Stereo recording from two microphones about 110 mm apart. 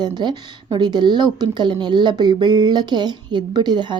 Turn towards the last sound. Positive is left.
turn(degrees=-45)  # may be behind; listen again after turning